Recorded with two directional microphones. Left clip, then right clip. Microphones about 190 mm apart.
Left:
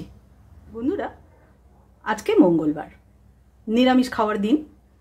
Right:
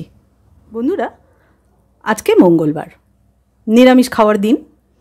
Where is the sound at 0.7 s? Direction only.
50° right (ahead or behind).